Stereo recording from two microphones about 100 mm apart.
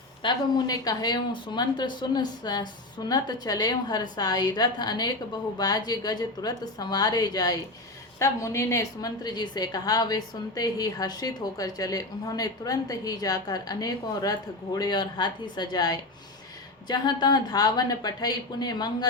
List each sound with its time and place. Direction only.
0.2 s a woman's voice: 50° left (ahead or behind)
8.2 s a woman's voice: 30° left (ahead or behind)